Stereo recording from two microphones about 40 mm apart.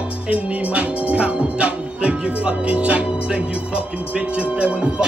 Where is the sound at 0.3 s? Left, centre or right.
Right.